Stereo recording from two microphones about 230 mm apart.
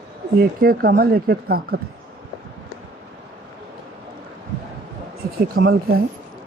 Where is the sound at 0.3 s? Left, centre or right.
Right.